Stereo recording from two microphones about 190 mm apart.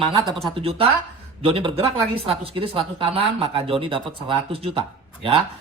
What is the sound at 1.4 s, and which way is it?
Speech, 30° right (ahead or behind).